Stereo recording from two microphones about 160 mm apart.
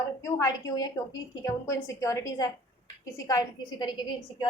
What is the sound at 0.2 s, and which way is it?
A woman's voice, 20° left (ahead or behind).